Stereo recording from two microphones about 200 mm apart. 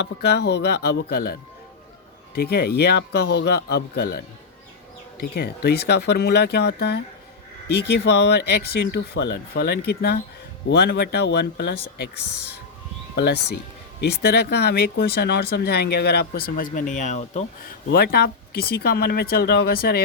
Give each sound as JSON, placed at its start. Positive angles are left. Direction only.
{"t": 0.0, "sound": "speech", "side_deg": 55}
{"t": 5.2, "sound": "speech", "side_deg": 55}
{"t": 13.1, "sound": "speech", "side_deg": 55}
{"t": 17.8, "sound": "speech", "side_deg": 50}